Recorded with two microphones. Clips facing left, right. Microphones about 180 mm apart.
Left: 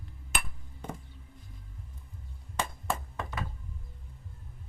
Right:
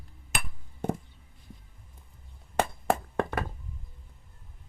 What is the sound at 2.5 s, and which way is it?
Clapping, 60° right (ahead or behind).